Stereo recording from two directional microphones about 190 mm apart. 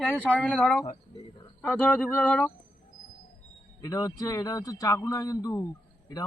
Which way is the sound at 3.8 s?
20° left (ahead or behind).